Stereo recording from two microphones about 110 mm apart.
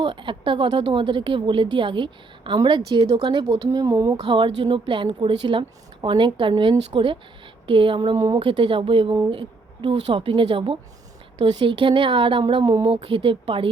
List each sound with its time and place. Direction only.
0.0 s a woman's voice: 50° right (ahead or behind)
3.2 s speech: 35° right (ahead or behind)
4.3 s a woman's voice: 45° right (ahead or behind)
8.1 s speech: 35° right (ahead or behind)
8.4 s a woman's voice: 55° right (ahead or behind)